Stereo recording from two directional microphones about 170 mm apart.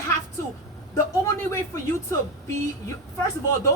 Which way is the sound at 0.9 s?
15° left (ahead or behind).